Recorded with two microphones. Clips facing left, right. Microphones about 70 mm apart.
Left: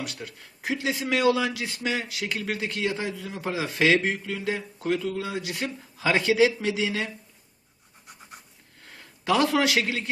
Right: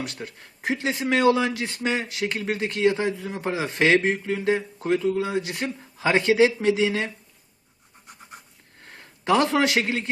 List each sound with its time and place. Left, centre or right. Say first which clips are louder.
0.0 s speech: right 2 dB; right
8.8 s a man's voice: right 2 dB; right